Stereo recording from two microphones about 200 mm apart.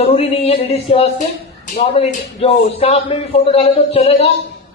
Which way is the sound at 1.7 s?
30° left (ahead or behind).